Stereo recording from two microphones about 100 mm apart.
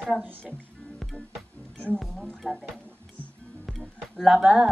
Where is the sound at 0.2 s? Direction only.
15° right (ahead or behind).